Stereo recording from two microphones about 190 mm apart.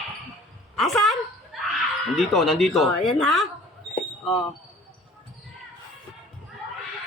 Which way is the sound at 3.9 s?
25° left (ahead or behind).